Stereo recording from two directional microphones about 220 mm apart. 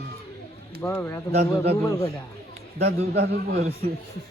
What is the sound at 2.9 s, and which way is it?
Speech, 45° right (ahead or behind).